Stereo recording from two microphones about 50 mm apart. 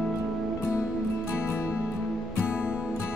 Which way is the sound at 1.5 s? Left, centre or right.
Left.